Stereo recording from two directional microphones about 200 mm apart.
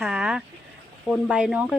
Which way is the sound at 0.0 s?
5° right (ahead or behind).